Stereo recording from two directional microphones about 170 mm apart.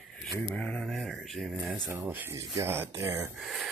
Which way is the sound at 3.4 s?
Centre (ahead or behind).